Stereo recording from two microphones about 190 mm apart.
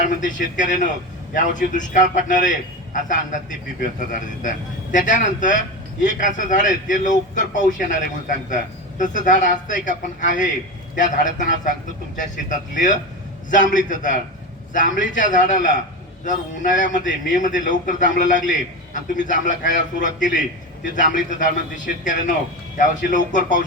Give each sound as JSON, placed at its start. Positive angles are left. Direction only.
{"t": 0.0, "sound": "a man's voice", "side_deg": 45}
{"t": 3.8, "sound": "a man's voice", "side_deg": 45}